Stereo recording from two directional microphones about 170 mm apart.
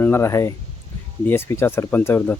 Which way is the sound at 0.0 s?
15° left (ahead or behind).